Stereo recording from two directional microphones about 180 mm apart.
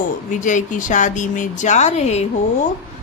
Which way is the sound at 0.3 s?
45° left (ahead or behind).